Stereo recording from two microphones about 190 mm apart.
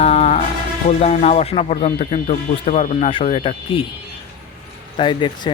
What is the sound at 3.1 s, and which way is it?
Speech, 30° left (ahead or behind).